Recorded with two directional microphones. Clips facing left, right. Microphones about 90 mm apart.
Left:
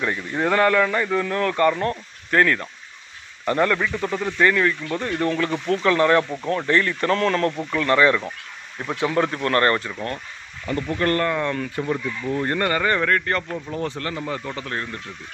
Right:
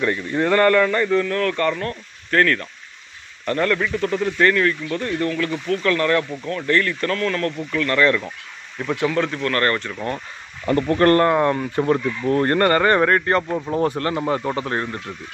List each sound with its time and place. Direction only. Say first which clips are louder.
0.0 s a man's voice: right 3 dB; 10° left (ahead or behind)
7.2 s speech: left 2 dB; 30° left (ahead or behind)
7.5 s a man's voice: left 1 dB; 20° left (ahead or behind)
10.0 s speech: right 3 dB; 5° right (ahead or behind)
10.7 s speech: right 7 dB; 55° right (ahead or behind)
11.2 s speech: right 6 dB; 30° right (ahead or behind)
11.8 s speech: right 8 dB; 65° right (ahead or behind)
13.0 s speech: right 4 dB; 30° right (ahead or behind)